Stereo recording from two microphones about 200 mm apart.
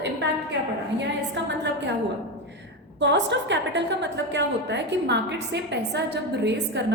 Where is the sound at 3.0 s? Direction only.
60° right (ahead or behind).